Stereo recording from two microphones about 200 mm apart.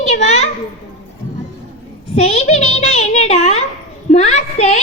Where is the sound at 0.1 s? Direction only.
35° left (ahead or behind).